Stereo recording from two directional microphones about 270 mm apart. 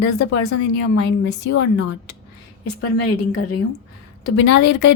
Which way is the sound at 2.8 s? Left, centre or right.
Left.